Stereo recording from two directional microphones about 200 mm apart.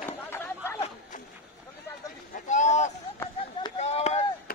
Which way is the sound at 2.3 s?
40° left (ahead or behind).